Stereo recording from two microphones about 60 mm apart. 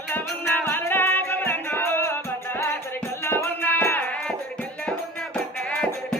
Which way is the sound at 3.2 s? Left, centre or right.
Left.